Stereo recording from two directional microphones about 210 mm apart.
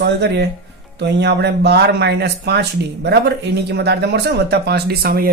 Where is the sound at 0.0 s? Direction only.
55° right (ahead or behind).